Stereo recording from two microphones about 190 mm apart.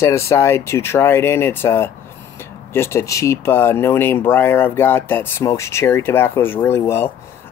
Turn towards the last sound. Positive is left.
turn(degrees=15)  # may be behind; listen again after turning